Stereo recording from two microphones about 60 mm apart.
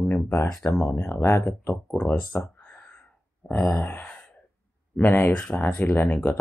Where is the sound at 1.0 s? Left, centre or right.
Left.